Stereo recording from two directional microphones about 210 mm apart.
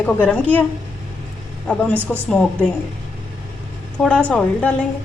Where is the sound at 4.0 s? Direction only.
5° left (ahead or behind).